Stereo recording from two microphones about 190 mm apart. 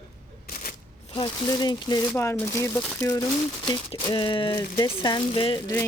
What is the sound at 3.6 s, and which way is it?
Speech, 20° left (ahead or behind).